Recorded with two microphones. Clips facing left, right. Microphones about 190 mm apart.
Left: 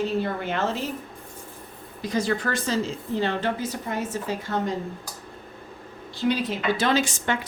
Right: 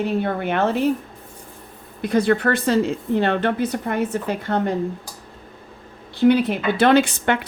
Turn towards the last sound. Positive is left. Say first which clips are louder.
# right 7 dB
turn(degrees=-60)  # may be behind; listen again after turning